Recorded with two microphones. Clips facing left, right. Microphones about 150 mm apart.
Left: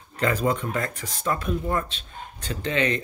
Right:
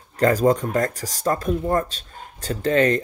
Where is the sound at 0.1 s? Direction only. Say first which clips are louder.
Right 6 dB; 40° right (ahead or behind).